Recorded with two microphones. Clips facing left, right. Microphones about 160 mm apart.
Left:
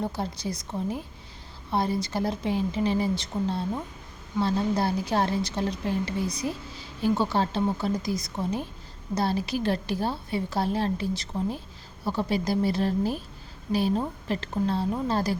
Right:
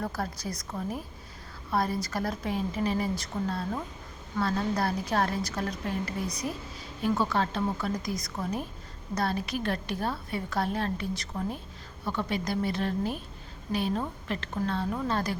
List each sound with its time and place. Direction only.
0.0 s a woman's voice: 25° left (ahead or behind)